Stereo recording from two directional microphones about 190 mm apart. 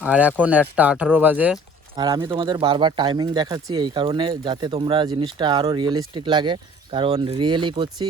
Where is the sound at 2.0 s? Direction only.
25° right (ahead or behind).